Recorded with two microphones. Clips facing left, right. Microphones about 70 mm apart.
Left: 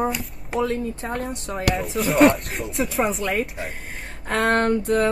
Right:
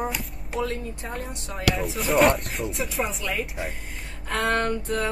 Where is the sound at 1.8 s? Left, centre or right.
Centre.